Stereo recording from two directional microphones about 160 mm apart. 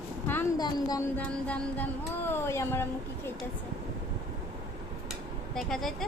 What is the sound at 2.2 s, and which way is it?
Speech, 15° left (ahead or behind).